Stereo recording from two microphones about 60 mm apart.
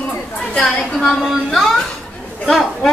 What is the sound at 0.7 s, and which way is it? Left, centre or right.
A woman's voice, centre.